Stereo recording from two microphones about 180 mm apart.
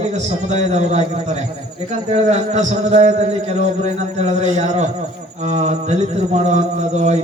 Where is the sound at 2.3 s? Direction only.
40° right (ahead or behind).